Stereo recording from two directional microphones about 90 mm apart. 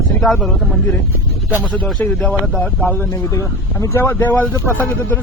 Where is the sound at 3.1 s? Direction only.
35° left (ahead or behind).